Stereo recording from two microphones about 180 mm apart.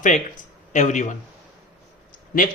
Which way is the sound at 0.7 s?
45° left (ahead or behind).